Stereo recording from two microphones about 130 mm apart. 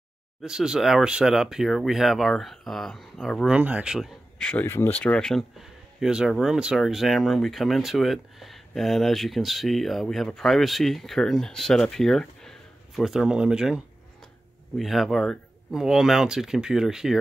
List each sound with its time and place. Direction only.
0.4 s speech: 5° right (ahead or behind)
3.5 s speech: 10° right (ahead or behind)
4.5 s speech: 15° left (ahead or behind); by 17.2 s 5° right (ahead or behind)